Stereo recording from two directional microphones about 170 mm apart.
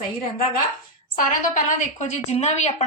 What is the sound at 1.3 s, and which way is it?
Speech, 50° left (ahead or behind).